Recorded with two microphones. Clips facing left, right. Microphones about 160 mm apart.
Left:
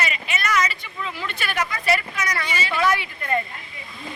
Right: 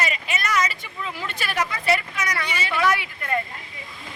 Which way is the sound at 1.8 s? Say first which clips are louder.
Left 1 dB; 20° right (ahead or behind).